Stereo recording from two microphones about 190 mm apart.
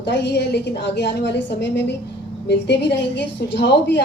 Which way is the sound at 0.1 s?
65° left (ahead or behind).